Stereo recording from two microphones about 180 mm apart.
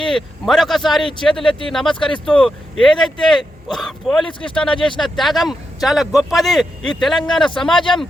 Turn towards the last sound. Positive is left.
turn(degrees=5)  # may be behind; listen again after turning